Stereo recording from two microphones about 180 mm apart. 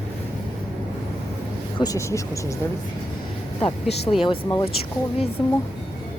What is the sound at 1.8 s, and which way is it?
Speech, 20° left (ahead or behind).